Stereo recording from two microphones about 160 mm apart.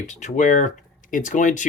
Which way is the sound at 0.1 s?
50° left (ahead or behind).